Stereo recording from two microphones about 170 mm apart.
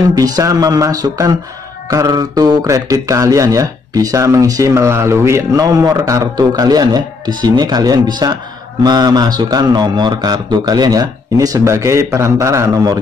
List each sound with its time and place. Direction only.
0.1 s speech: 20° right (ahead or behind)